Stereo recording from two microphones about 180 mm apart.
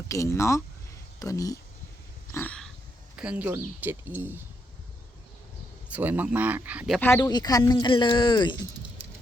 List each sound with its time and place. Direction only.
0.1 s speech: 15° left (ahead or behind)
2.3 s dog: 10° left (ahead or behind)
3.2 s speech: 5° right (ahead or behind)
5.9 s speech: 10° right (ahead or behind)
7.0 s speech: 10° left (ahead or behind)
7.3 s speech: 20° left (ahead or behind)